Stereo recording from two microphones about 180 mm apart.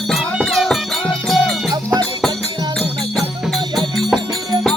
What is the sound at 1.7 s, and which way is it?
Music, 20° right (ahead or behind).